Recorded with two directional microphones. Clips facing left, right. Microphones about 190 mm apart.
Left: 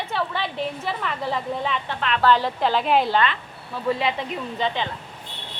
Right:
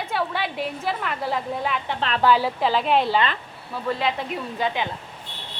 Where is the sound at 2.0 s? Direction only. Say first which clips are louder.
Even; 35° right (ahead or behind).